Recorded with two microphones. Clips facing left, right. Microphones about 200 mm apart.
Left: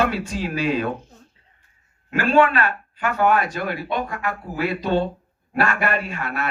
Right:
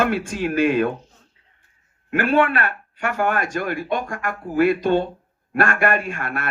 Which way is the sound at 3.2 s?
50° right (ahead or behind).